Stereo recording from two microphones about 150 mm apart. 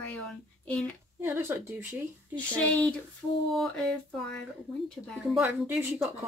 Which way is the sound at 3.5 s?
5° left (ahead or behind).